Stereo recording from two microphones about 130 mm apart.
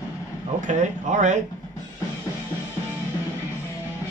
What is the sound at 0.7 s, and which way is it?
Speech, 70° right (ahead or behind).